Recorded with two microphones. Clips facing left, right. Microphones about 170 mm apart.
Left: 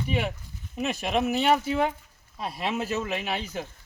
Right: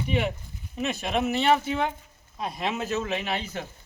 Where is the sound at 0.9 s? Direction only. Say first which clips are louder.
Left 1 dB; 10° left (ahead or behind).